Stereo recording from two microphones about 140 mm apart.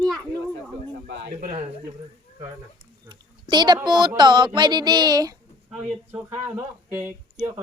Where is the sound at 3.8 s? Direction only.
30° right (ahead or behind).